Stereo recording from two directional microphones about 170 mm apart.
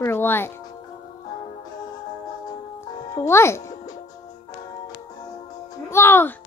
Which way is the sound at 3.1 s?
15° left (ahead or behind).